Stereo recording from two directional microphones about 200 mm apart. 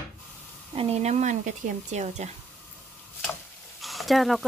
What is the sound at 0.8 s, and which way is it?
Speech, 30° right (ahead or behind).